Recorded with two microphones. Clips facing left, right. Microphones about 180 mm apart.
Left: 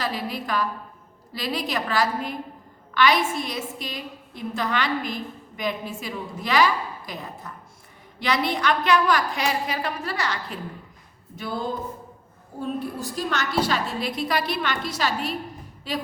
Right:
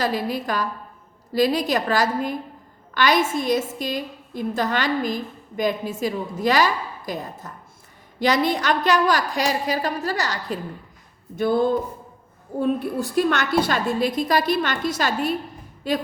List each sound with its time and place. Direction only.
0.0 s a woman's voice: 45° right (ahead or behind)
11.3 s a woman's voice: 55° right (ahead or behind)